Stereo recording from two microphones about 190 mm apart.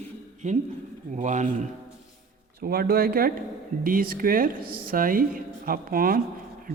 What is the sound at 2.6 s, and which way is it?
Speech, 55° right (ahead or behind).